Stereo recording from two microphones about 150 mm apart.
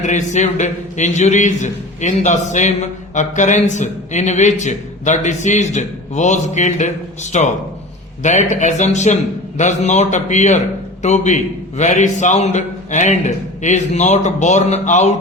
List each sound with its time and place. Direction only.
0.0 s a man's voice: 55° left (ahead or behind)